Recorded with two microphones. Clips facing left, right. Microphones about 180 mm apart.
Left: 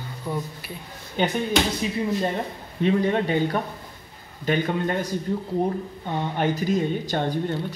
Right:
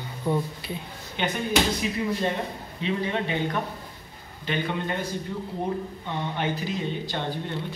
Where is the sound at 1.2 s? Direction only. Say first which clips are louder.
Left 5 dB; 40° left (ahead or behind).